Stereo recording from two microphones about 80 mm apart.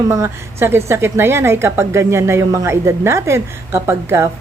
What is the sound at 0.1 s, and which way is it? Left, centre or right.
A woman's voice, right.